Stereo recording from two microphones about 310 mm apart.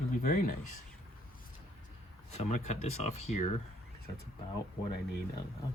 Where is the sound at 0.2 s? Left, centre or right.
Left.